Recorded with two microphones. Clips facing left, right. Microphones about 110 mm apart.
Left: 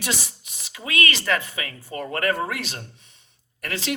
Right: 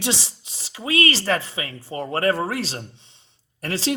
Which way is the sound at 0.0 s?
30° right (ahead or behind).